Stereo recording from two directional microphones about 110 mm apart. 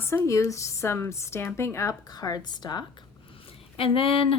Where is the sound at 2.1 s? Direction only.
35° left (ahead or behind).